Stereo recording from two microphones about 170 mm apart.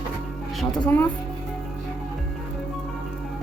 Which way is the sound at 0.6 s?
10° left (ahead or behind).